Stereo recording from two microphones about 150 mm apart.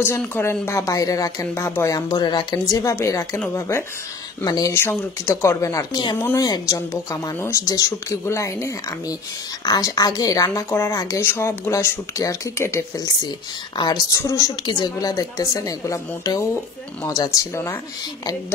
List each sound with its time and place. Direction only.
0.2 s speech: 15° left (ahead or behind)